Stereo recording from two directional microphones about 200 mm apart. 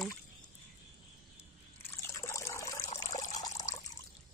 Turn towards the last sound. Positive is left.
turn(degrees=15)  # may be behind; listen again after turning